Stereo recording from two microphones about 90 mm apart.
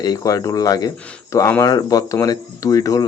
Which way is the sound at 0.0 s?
45° left (ahead or behind).